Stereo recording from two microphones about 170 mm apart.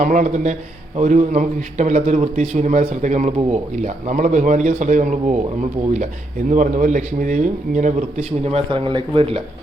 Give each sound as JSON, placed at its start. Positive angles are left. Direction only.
{"t": 0.0, "sound": "a man's voice", "side_deg": -45}
{"t": 6.5, "sound": "a man's voice", "side_deg": -50}
{"t": 8.4, "sound": "speech", "side_deg": -35}